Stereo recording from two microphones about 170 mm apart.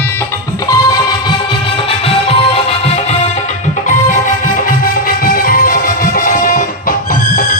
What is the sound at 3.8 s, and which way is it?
Music, 50° left (ahead or behind).